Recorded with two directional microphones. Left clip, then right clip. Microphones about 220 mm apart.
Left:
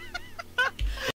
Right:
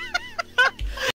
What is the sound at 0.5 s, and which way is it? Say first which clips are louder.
Music: right 7 dB; 35° right (ahead or behind).